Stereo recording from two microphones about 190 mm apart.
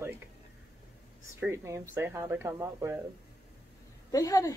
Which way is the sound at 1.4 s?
15° right (ahead or behind).